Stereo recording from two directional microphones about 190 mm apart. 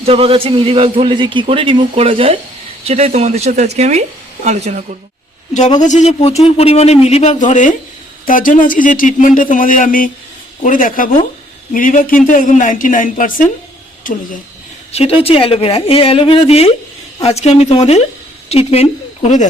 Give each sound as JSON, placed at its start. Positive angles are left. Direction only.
{"t": 0.0, "sound": "a man's voice", "side_deg": -30}
{"t": 5.8, "sound": "a woman's voice", "side_deg": 35}
{"t": 14.9, "sound": "speech", "side_deg": 30}